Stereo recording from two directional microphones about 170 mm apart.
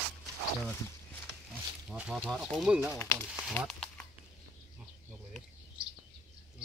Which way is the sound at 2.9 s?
15° left (ahead or behind).